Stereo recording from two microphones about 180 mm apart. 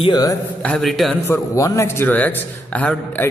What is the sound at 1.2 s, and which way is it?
A man's voice, 15° left (ahead or behind).